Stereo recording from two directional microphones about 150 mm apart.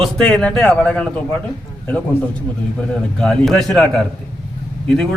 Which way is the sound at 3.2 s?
5° left (ahead or behind).